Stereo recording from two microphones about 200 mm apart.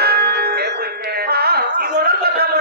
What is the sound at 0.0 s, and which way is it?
Music, 50° right (ahead or behind).